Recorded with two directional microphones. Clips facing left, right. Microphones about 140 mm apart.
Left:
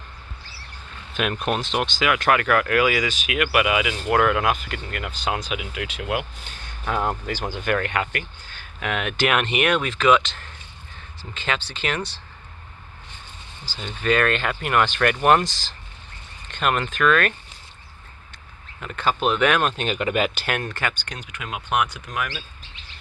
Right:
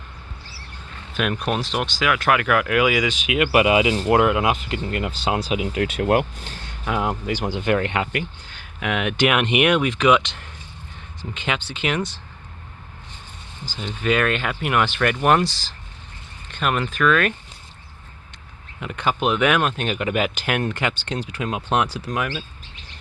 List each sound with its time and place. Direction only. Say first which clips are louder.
1.1 s speech: right 1 dB; centre (ahead or behind); by 6.6 s 40° right (ahead or behind)
6.8 s speech: right 1 dB; 10° right (ahead or behind)
13.8 s speech: even; 5° right (ahead or behind)
15.4 s speech: right 5 dB; 40° right (ahead or behind)
16.5 s speech: even; centre (ahead or behind)
18.8 s speech: even; 15° right (ahead or behind)